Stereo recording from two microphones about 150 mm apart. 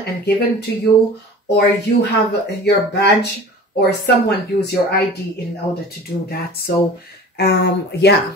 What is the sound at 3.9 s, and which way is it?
Speech, 90° left.